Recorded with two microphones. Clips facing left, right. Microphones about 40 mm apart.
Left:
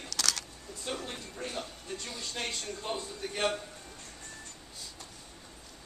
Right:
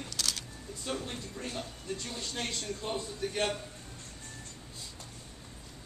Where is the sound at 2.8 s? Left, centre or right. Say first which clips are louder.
Right 2 dB; centre.